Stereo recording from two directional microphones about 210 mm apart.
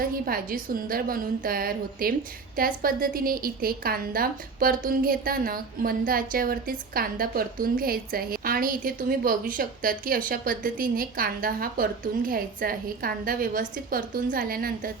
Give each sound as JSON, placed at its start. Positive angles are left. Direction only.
{"t": 0.3, "sound": "a woman's voice", "side_deg": -45}